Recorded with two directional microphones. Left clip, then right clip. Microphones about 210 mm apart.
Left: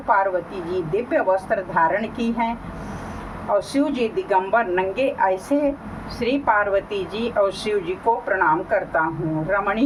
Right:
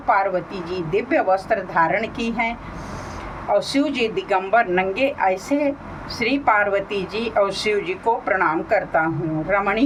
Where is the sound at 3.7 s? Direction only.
15° right (ahead or behind).